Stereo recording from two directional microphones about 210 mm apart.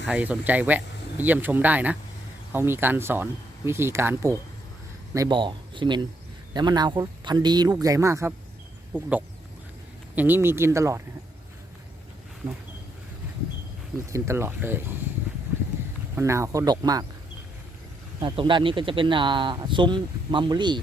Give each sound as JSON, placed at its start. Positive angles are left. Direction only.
{"t": 0.1, "sound": "a man's voice", "side_deg": -10}
{"t": 14.1, "sound": "speech", "side_deg": -10}
{"t": 16.1, "sound": "speech", "side_deg": -15}
{"t": 18.2, "sound": "a man's voice", "side_deg": -20}